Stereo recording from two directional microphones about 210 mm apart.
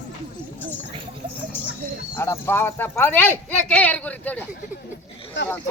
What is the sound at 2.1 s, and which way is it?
Speech, 10° left (ahead or behind).